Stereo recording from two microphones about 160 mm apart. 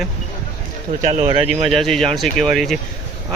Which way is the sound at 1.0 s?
45° right (ahead or behind).